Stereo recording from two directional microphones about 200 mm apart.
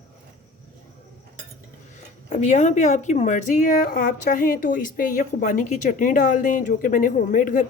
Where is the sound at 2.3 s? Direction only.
35° left (ahead or behind).